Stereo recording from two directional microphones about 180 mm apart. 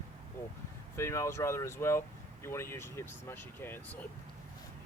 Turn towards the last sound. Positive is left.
turn(degrees=10)  # may be behind; listen again after turning